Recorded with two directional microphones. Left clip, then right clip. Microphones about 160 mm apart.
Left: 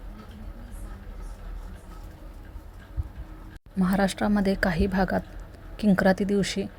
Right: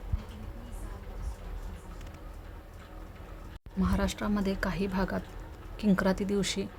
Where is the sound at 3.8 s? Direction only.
30° left (ahead or behind).